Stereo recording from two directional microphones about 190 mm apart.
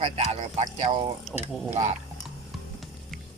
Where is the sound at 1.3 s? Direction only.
Centre (ahead or behind).